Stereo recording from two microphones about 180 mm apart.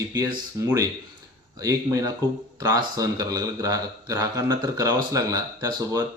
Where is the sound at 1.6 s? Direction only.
20° right (ahead or behind).